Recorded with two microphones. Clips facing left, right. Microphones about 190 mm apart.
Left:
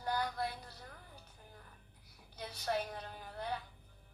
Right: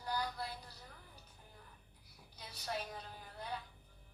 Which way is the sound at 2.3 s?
60° left (ahead or behind).